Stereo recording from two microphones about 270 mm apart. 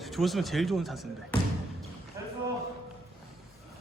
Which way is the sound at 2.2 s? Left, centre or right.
Centre.